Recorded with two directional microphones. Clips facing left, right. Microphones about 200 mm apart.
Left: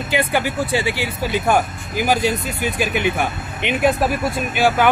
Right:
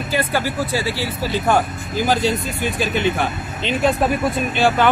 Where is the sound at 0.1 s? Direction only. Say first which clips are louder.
Left 1 dB; 20° left (ahead or behind).